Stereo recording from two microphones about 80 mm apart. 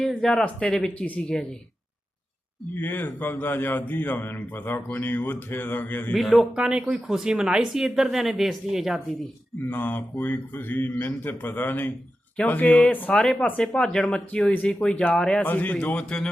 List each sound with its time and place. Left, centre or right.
0.2 s speech: centre
2.7 s speech: left
6.1 s speech: centre
9.6 s speech: left
15.4 s speech: left